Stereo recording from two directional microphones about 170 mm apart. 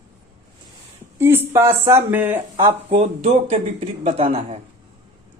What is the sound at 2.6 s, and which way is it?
Speech, 30° right (ahead or behind).